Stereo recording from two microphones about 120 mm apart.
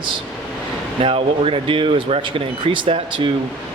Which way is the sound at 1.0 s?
50° right (ahead or behind).